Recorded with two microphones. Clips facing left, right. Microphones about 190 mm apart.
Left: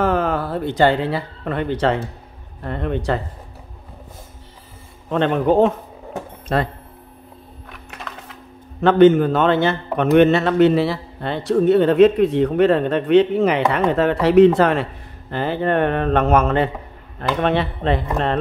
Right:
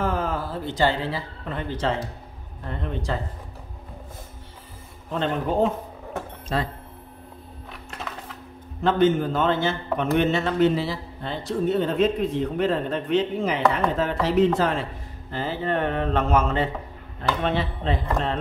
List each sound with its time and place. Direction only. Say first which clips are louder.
0.0 s a man's voice: left 7 dB; 70° left (ahead or behind)
5.1 s a man's voice: left 8 dB; 70° left (ahead or behind)
6.5 s speech: left 6 dB; 60° left (ahead or behind)
8.8 s a man's voice: left 8 dB; 70° left (ahead or behind)